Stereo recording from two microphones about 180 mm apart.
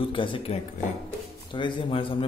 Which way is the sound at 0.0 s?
30° left (ahead or behind).